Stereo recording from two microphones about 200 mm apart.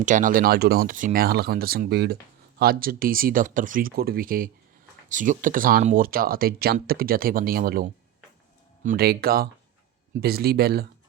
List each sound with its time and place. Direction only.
0.0 s speech: 40° right (ahead or behind)